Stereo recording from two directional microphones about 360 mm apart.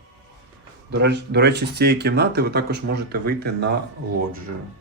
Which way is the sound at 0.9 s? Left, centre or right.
Right.